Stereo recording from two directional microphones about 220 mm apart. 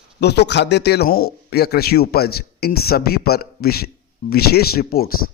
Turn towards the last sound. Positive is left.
turn(degrees=40)  # may be behind; listen again after turning